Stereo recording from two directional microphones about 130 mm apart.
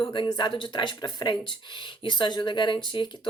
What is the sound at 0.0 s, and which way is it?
Speech, 35° left (ahead or behind).